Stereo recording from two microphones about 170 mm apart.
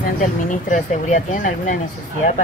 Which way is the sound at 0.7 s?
45° left (ahead or behind).